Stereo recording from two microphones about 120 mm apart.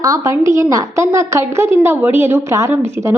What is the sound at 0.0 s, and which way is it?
A woman's voice, 30° right (ahead or behind).